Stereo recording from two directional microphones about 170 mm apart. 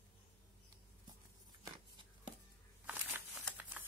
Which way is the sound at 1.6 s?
30° right (ahead or behind).